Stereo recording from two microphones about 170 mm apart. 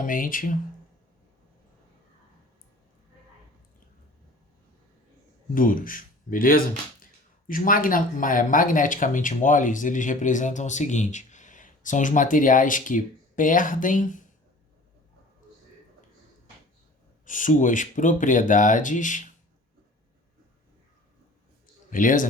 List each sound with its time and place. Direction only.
0.0 s speech: 55° left (ahead or behind)
5.5 s speech: 55° left (ahead or behind)
17.2 s speech: 50° left (ahead or behind)
21.8 s speech: 50° left (ahead or behind)